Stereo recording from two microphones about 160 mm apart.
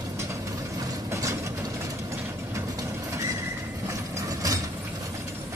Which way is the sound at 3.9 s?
20° right (ahead or behind).